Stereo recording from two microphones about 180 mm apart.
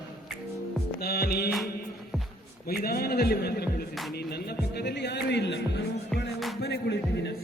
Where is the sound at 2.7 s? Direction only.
55° left (ahead or behind); by 5.8 s 75° left (ahead or behind).